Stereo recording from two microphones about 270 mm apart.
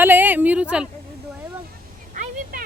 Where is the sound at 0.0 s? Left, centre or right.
Centre.